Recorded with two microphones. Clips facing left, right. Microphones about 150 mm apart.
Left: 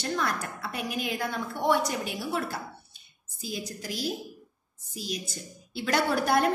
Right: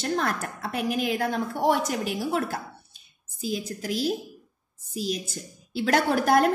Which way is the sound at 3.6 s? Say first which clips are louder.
Right 3 dB; 55° right (ahead or behind).